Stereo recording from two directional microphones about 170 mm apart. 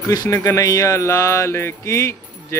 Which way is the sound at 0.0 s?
20° left (ahead or behind).